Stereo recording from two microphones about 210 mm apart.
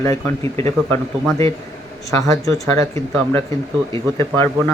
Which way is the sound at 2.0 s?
15° left (ahead or behind).